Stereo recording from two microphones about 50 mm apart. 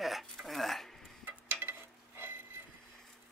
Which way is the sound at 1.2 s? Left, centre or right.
Right.